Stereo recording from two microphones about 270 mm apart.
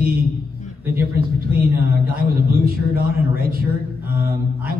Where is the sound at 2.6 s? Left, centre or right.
Right.